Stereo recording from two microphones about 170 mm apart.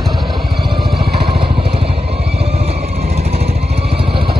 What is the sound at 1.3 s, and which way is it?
Vehicle, 35° right (ahead or behind).